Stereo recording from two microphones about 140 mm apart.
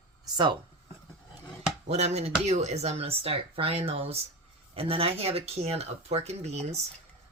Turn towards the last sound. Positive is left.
turn(degrees=-50)  # may be behind; listen again after turning